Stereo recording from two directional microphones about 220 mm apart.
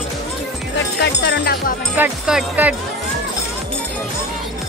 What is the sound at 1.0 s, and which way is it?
Speech, 50° left (ahead or behind).